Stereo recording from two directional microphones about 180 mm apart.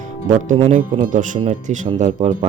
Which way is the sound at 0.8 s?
50° right (ahead or behind).